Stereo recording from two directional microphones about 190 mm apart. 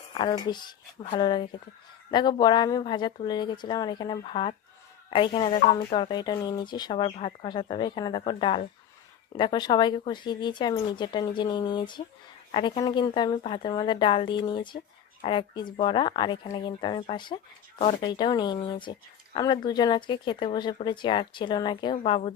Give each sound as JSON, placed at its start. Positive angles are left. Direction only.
{"t": 0.1, "sound": "speech", "side_deg": 25}